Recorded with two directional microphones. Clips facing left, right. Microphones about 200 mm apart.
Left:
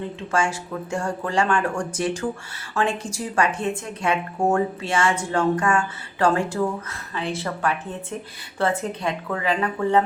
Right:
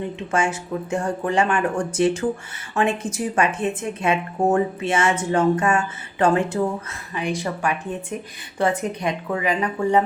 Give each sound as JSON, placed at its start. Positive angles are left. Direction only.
{"t": 0.0, "sound": "speech", "side_deg": -20}